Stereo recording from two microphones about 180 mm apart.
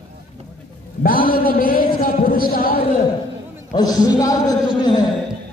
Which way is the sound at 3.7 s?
20° left (ahead or behind).